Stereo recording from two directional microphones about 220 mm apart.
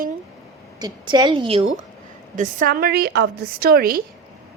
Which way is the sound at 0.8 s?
20° right (ahead or behind).